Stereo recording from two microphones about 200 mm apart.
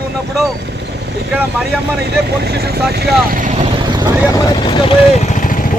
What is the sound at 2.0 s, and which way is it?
Speech, 55° right (ahead or behind).